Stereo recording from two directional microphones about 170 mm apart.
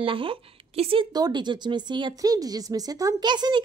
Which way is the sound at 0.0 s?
30° right (ahead or behind).